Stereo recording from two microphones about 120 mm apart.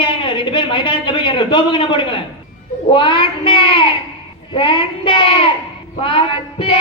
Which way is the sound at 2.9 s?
45° left (ahead or behind).